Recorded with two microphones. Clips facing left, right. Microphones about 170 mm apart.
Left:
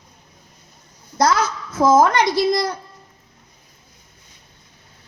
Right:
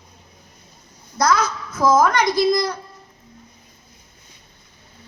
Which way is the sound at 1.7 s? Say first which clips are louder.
Left 2 dB; 25° left (ahead or behind).